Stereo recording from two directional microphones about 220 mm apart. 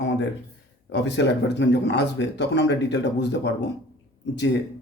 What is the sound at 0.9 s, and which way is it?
Speech, 50° left (ahead or behind).